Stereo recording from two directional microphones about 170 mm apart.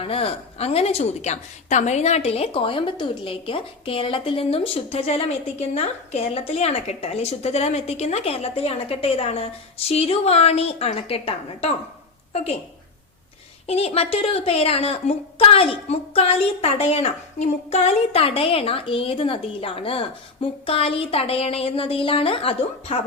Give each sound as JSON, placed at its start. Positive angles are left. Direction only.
{"t": 0.0, "sound": "a woman's voice", "side_deg": 35}
{"t": 13.7, "sound": "a woman's voice", "side_deg": 35}